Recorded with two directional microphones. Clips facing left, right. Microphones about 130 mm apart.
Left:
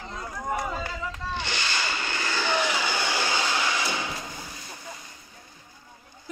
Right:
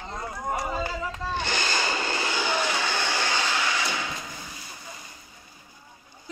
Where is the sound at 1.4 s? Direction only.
45° right (ahead or behind).